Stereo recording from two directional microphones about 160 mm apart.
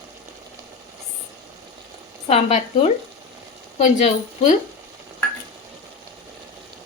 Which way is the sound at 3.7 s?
50° left (ahead or behind).